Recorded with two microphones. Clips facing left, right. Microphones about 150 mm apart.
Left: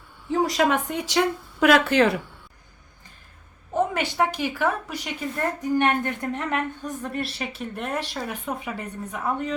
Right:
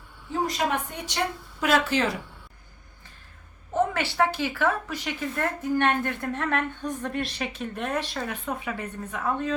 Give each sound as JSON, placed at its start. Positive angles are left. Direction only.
{"t": 0.4, "sound": "speech", "side_deg": 90}
{"t": 3.8, "sound": "a woman's voice", "side_deg": 15}